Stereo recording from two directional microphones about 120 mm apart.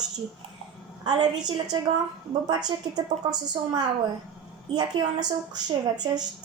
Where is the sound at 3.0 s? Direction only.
35° right (ahead or behind).